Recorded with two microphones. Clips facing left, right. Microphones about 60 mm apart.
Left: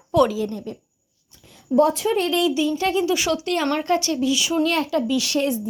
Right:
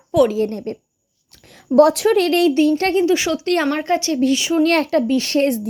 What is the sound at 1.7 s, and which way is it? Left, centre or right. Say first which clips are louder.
Speech: right 6 dB; right.